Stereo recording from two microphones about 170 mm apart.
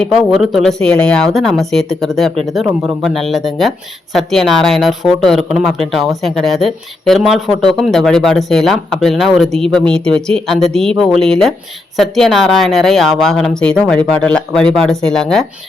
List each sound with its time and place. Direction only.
0.0 s speech: centre (ahead or behind)